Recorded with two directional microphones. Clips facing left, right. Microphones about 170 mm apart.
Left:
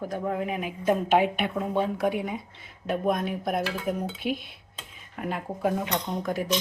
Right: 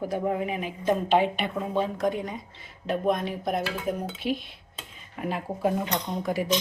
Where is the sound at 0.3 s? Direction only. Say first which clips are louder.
Right 1 dB; centre (ahead or behind).